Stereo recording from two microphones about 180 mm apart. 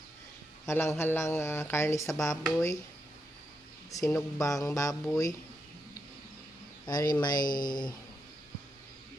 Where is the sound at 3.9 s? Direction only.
20° left (ahead or behind).